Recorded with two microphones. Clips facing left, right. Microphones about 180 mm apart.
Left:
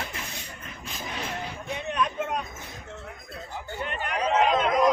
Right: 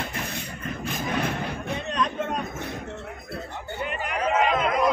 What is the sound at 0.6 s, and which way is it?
Vehicle, 55° right (ahead or behind).